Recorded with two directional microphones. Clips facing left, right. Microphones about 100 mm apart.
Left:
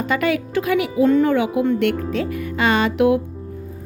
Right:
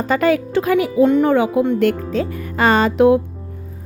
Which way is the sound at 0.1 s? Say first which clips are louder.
Right 5 dB; 35° right (ahead or behind).